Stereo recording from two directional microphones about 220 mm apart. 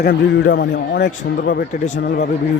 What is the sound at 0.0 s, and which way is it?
A man's voice, 55° left (ahead or behind).